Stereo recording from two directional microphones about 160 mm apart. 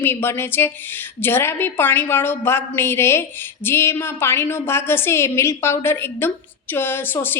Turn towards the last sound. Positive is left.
turn(degrees=15)  # may be behind; listen again after turning